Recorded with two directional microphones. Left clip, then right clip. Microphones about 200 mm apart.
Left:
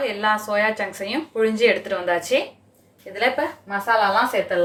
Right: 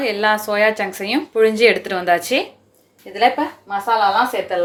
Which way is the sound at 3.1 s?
30° right (ahead or behind).